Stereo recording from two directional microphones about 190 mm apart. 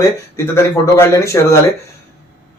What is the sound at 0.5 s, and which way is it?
A man's voice, 15° left (ahead or behind).